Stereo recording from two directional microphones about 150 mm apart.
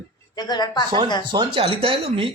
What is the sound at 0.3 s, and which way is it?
Speech, 25° left (ahead or behind).